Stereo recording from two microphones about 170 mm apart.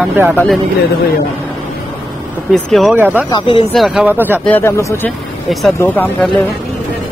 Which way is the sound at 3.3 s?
30° left (ahead or behind).